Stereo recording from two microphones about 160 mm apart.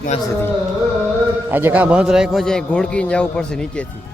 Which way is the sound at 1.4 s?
10° right (ahead or behind).